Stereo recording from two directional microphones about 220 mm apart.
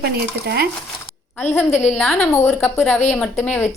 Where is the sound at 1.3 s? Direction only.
10° left (ahead or behind).